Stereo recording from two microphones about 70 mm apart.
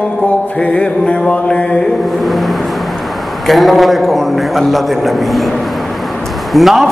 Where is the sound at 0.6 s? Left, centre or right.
Centre.